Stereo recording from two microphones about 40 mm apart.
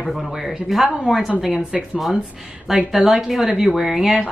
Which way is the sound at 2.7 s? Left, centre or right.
Centre.